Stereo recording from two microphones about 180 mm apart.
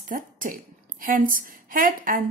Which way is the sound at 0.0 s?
50° right (ahead or behind).